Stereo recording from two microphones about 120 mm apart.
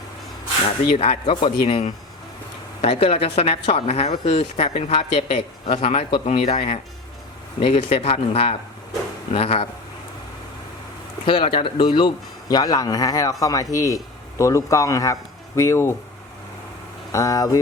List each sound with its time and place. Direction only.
0.9 s speech: 55° left (ahead or behind)
2.8 s a woman's voice: 55° left (ahead or behind)
11.3 s a man's voice: 45° left (ahead or behind); by 16.0 s 20° left (ahead or behind)
17.1 s speech: 25° left (ahead or behind)